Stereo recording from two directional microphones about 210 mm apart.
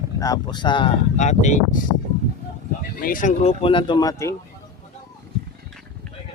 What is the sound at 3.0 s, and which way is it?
Speech, 40° left (ahead or behind).